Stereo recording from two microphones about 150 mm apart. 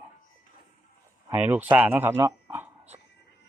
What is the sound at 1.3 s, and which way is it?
Speech, 15° right (ahead or behind).